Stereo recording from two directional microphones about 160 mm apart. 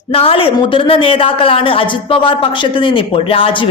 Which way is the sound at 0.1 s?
35° left (ahead or behind).